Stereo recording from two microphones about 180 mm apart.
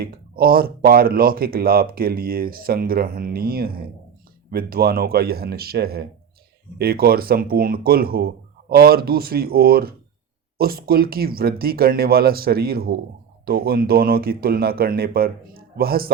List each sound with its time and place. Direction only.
0.0 s speech: 55° right (ahead or behind)